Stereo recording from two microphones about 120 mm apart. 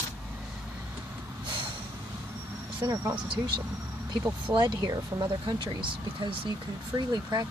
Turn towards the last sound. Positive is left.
turn(degrees=-35)  # may be behind; listen again after turning